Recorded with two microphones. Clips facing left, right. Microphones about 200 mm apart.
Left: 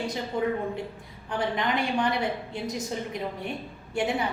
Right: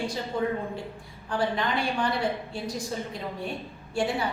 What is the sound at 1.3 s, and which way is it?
A woman's voice, 20° left (ahead or behind).